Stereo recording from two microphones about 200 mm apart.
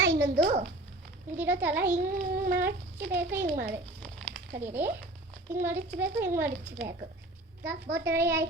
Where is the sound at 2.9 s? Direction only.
60° right (ahead or behind).